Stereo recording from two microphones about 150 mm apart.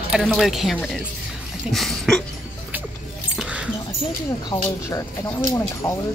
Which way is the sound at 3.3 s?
5° right (ahead or behind).